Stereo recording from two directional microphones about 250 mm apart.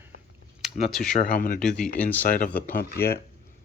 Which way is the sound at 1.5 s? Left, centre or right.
Centre.